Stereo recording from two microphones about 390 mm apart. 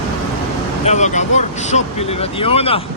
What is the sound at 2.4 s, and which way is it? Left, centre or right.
Speech, centre.